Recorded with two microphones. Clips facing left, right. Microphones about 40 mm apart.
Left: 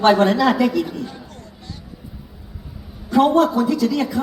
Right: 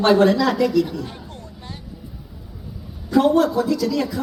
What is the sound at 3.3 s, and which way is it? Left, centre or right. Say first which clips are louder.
Speech: left 1 dB; left.